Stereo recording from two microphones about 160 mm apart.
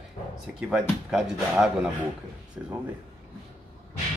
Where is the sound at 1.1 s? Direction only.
5° right (ahead or behind).